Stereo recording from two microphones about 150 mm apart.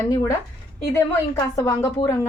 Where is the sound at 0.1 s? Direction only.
25° left (ahead or behind).